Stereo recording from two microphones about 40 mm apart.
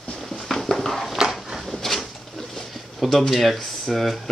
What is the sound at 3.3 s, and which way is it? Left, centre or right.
Speech, centre.